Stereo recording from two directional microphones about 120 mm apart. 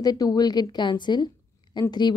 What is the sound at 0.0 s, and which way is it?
A woman's voice, 35° left (ahead or behind).